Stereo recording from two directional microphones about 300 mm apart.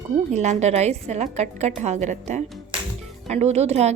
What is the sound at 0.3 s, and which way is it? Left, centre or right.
A woman's voice, right.